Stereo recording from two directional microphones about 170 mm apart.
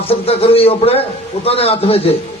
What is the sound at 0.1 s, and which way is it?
A man's voice, 35° left (ahead or behind).